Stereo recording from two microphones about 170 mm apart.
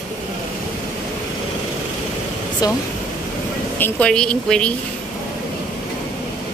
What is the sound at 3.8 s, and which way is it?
Speech, 5° left (ahead or behind).